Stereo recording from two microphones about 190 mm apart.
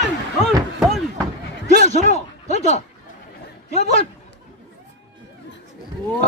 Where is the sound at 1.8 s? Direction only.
35° left (ahead or behind).